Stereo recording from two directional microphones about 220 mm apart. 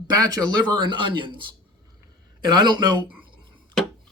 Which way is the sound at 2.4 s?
20° right (ahead or behind).